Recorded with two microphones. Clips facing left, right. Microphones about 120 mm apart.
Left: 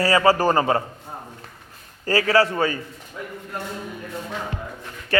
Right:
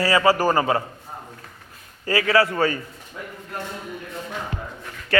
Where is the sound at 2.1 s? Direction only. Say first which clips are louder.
Left 1 dB; 35° left (ahead or behind).